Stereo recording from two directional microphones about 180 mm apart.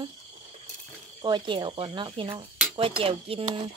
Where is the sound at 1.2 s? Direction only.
25° right (ahead or behind).